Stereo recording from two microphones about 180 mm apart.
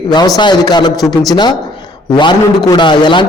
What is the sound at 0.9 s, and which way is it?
Speech, centre (ahead or behind).